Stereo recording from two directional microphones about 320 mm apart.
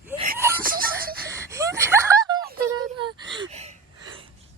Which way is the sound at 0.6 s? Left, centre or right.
Right.